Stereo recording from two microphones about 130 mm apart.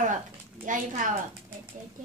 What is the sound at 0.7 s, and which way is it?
Speech, 90° right.